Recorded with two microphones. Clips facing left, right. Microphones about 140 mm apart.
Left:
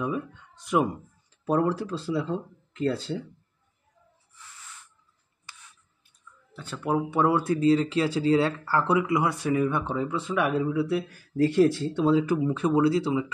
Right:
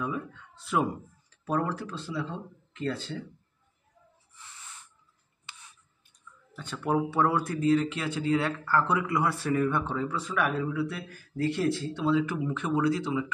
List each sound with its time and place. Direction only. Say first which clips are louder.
0.0 s speech: left 3 dB; 20° left (ahead or behind); by 3.2 s 40° left (ahead or behind)
6.5 s speech: left 1 dB; 5° left (ahead or behind)
7.1 s speech: left 3 dB; 20° left (ahead or behind)
10.8 s speech: left 6 dB; 40° left (ahead or behind)